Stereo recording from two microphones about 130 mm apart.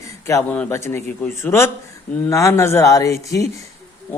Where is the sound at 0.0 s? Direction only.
25° left (ahead or behind).